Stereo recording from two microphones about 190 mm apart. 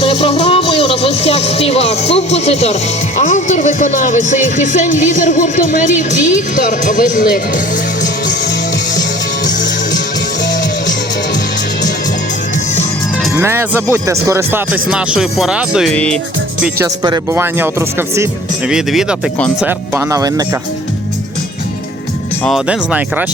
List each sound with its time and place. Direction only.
0.0 s music: 30° left (ahead or behind)
3.2 s speech: 40° left (ahead or behind)
13.3 s speech: 15° right (ahead or behind); by 16.1 s 5° left (ahead or behind)
16.7 s speech: 20° right (ahead or behind)
18.7 s speech: centre (ahead or behind); by 20.4 s 20° right (ahead or behind)
22.4 s speech: 5° right (ahead or behind)